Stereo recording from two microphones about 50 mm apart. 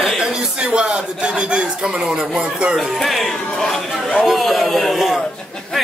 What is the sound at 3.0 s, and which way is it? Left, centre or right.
A man's voice, centre.